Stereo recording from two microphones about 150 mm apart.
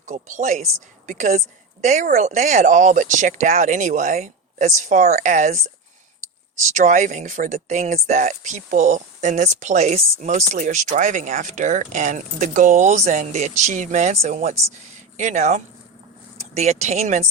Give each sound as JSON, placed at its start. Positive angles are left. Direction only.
{"t": 0.0, "sound": "a woman's voice", "side_deg": -55}